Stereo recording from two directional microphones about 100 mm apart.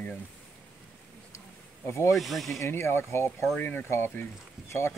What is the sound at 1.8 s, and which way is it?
Speech, 30° left (ahead or behind).